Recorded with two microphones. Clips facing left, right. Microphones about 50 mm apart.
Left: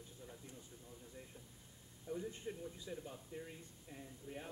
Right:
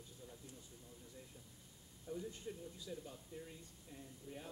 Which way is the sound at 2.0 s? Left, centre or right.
Left.